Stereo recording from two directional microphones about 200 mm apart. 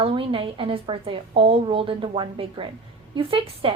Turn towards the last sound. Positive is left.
turn(degrees=-25)  # may be behind; listen again after turning